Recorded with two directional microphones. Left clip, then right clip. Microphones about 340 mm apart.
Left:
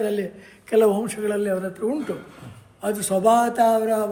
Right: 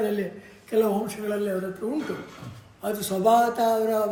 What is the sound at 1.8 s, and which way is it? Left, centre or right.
Speech, left.